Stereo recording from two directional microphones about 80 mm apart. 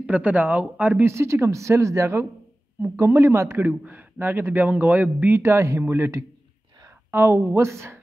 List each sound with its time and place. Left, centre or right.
0.0 s a man's voice: centre; by 8.0 s right